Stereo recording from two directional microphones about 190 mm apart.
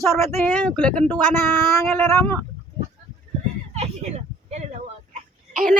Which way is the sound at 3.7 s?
35° right (ahead or behind).